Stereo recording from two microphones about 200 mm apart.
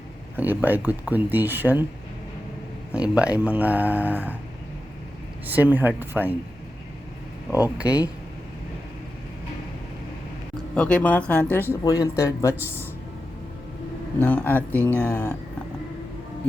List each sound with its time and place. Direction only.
0.3 s speech: 10° right (ahead or behind)
2.9 s speech: 5° right (ahead or behind)
5.5 s speech: 10° right (ahead or behind)
7.5 s speech: 5° right (ahead or behind)
10.8 s speech: 5° left (ahead or behind)
12.5 s speech: 10° right (ahead or behind)
14.2 s speech: 10° left (ahead or behind)